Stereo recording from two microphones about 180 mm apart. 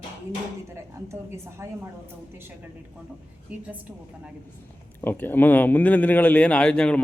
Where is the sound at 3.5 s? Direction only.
10° right (ahead or behind).